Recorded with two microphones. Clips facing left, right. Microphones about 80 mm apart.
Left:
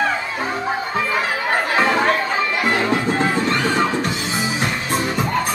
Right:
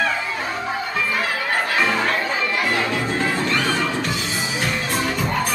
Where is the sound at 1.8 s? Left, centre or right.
Left.